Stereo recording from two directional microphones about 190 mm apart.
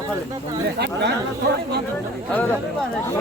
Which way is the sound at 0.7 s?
60° right (ahead or behind).